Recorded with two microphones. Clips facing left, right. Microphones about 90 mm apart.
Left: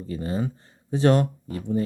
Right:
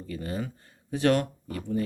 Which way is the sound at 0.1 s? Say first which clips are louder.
Left 5 dB; 30° left (ahead or behind).